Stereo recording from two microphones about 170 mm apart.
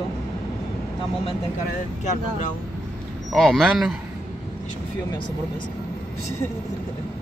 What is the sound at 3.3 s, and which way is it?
Speech, 5° left (ahead or behind).